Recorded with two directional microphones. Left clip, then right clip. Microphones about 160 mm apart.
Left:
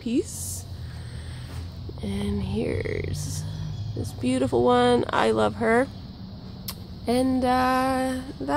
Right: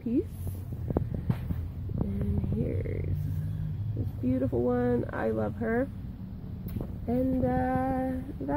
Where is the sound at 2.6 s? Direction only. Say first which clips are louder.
Left 9 dB; 35° left (ahead or behind).